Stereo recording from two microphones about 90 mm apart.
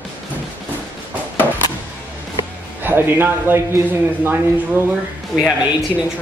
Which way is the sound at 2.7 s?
25° right (ahead or behind).